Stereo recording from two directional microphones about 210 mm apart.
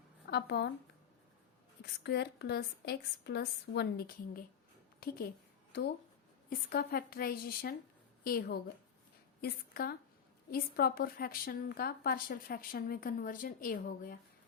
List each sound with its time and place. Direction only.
0.3 s a woman's voice: 50° left (ahead or behind)
1.8 s a woman's voice: 50° left (ahead or behind)
6.5 s a woman's voice: 45° left (ahead or behind)